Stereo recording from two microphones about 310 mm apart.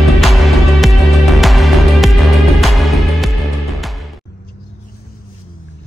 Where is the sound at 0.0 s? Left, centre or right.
Centre.